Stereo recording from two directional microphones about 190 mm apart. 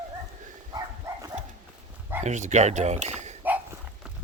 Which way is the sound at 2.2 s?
40° right (ahead or behind).